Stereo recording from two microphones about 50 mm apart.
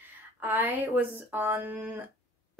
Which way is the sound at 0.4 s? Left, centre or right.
Right.